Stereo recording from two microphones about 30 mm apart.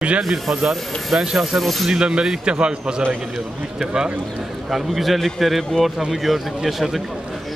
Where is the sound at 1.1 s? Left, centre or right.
Right.